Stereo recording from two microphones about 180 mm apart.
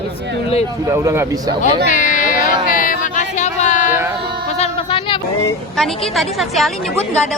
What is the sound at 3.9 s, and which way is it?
Speech, 15° right (ahead or behind).